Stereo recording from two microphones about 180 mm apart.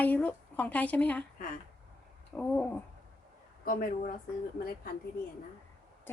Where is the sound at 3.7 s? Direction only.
50° left (ahead or behind).